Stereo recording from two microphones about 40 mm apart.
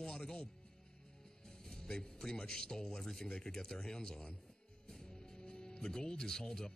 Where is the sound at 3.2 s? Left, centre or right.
Left.